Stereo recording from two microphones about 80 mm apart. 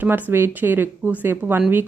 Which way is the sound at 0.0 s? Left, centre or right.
Right.